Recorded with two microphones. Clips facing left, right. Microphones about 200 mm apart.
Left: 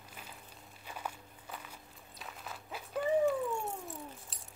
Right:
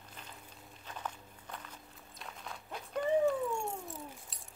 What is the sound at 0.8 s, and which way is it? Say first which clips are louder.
Walk: even; 10° left (ahead or behind).